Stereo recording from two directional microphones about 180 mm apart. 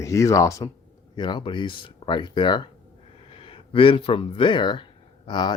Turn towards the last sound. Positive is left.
turn(degrees=25)  # may be behind; listen again after turning